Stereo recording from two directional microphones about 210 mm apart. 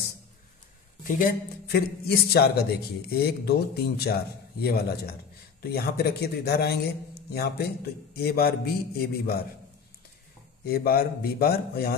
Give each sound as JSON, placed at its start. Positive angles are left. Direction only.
{"t": 1.0, "sound": "a man's voice", "side_deg": 40}
{"t": 10.6, "sound": "a man's voice", "side_deg": 45}